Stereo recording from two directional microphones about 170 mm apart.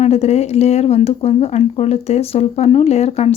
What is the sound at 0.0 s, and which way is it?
Speech, 40° left (ahead or behind).